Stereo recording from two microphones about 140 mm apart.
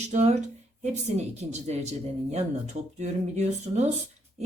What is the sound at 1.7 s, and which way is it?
A woman's voice, 50° right (ahead or behind).